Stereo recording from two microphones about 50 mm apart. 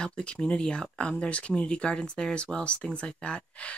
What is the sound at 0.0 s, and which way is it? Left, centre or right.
Speech, left.